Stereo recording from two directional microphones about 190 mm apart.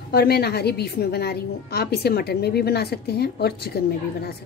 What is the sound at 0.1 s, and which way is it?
A woman's voice, 55° left (ahead or behind).